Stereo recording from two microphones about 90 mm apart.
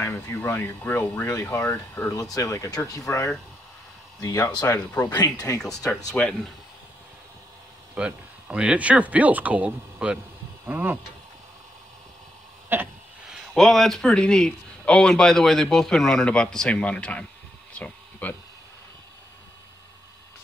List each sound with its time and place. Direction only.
0.0 s speech: 25° left (ahead or behind)
2.1 s speech: 40° left (ahead or behind)
6.1 s a man's voice: 10° left (ahead or behind)
7.9 s speech: 15° right (ahead or behind)
12.7 s a sound: 25° right (ahead or behind)
13.3 s a man's voice: centre (ahead or behind)
17.7 s a sound: 15° left (ahead or behind)